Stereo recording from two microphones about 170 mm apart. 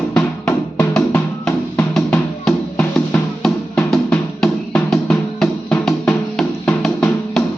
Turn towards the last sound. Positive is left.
turn(degrees=5)  # may be behind; listen again after turning